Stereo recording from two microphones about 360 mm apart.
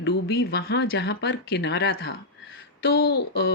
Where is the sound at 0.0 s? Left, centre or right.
Left.